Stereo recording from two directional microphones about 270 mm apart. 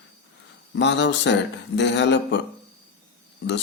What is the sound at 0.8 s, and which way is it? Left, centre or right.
Mantra, left.